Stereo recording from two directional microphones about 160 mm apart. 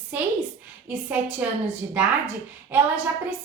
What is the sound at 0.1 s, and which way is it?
A woman's voice, 10° right (ahead or behind).